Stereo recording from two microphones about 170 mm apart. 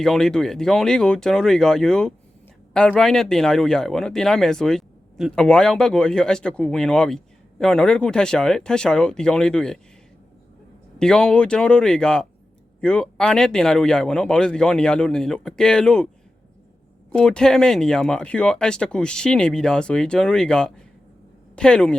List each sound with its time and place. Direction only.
0.0 s speech: 5° left (ahead or behind)
11.0 s speech: 5° left (ahead or behind)
17.1 s speech: 5° left (ahead or behind)